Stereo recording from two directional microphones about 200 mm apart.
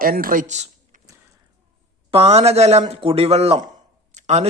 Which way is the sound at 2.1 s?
30° right (ahead or behind).